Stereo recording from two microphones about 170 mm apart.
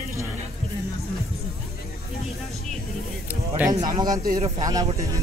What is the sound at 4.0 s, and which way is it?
Speech, 20° right (ahead or behind).